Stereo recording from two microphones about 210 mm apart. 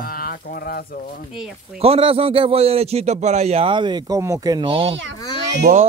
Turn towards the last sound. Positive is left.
turn(degrees=-40)  # may be behind; listen again after turning